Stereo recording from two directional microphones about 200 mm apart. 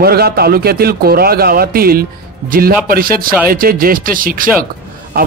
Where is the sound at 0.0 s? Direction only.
50° right (ahead or behind).